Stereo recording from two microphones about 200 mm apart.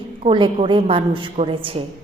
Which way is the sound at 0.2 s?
25° right (ahead or behind).